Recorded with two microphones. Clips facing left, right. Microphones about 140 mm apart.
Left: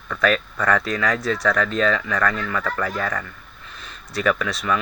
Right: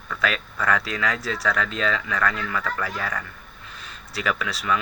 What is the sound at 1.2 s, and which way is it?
Speech, 30° right (ahead or behind).